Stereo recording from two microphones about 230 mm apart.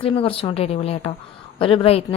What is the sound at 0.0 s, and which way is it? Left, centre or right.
A woman's voice, left.